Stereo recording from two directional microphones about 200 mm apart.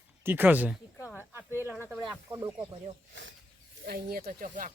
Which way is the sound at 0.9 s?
15° left (ahead or behind).